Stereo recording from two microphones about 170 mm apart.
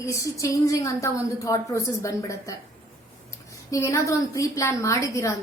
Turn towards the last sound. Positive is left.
turn(degrees=15)  # may be behind; listen again after turning